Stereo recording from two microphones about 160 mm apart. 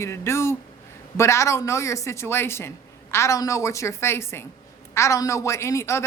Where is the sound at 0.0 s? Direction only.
15° left (ahead or behind).